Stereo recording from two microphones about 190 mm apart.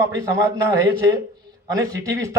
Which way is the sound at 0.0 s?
15° right (ahead or behind).